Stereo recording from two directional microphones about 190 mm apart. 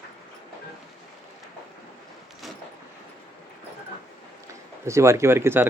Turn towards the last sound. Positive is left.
turn(degrees=-10)  # may be behind; listen again after turning